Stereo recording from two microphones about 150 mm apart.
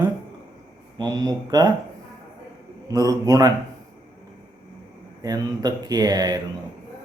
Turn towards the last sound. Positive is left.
turn(degrees=-25)  # may be behind; listen again after turning